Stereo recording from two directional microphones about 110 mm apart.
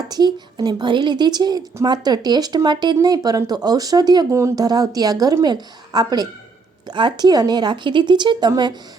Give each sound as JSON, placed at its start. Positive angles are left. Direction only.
{"t": 0.1, "sound": "a woman's voice", "side_deg": -40}